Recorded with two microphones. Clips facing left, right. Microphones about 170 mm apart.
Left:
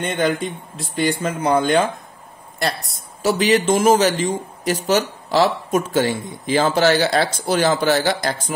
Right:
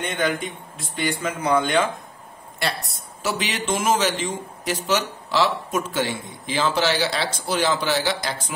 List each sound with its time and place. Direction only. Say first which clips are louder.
0.2 s speech: left 4 dB; 35° left (ahead or behind)
3.2 s a man's voice: left 10 dB; 40° left (ahead or behind)